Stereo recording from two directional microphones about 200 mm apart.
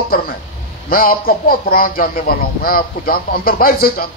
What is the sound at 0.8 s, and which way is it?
A man's voice, 45° left (ahead or behind).